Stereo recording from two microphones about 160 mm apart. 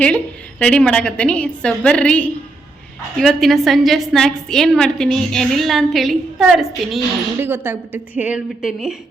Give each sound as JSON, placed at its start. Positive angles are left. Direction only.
{"t": 0.6, "sound": "a woman's voice", "side_deg": 5}
{"t": 7.3, "sound": "a woman's voice", "side_deg": -15}